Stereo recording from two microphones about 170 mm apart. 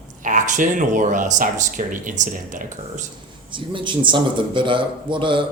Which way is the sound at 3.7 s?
30° right (ahead or behind).